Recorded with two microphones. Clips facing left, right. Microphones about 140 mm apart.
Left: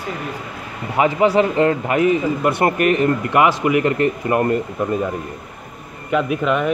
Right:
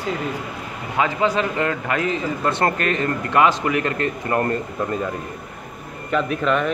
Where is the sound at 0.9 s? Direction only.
20° left (ahead or behind).